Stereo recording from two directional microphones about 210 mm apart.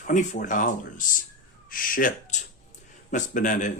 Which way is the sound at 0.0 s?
35° left (ahead or behind).